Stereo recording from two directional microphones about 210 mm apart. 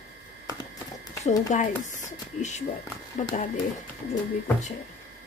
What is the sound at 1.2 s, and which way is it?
A woman's voice, 35° left (ahead or behind).